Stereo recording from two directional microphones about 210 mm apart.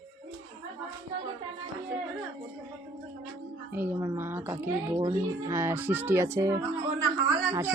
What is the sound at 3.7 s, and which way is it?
Speech, 10° right (ahead or behind).